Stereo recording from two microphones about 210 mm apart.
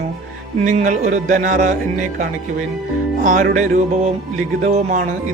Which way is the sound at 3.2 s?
40° right (ahead or behind).